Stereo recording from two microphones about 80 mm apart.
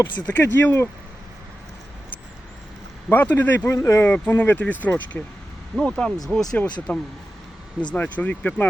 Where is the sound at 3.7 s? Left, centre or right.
Left.